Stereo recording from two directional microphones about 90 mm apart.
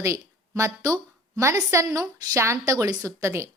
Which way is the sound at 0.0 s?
35° right (ahead or behind).